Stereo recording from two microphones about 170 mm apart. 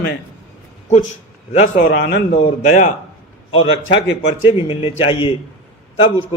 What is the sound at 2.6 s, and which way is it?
Speech, 45° left (ahead or behind).